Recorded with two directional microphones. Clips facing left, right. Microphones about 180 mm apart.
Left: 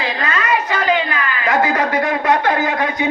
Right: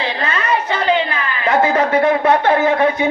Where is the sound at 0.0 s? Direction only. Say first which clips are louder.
Even; 30° right (ahead or behind).